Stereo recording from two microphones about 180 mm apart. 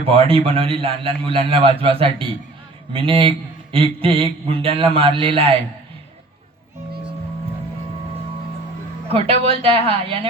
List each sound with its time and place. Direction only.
0.0 s a man's voice: 30° right (ahead or behind)
9.0 s a man's voice: 30° right (ahead or behind)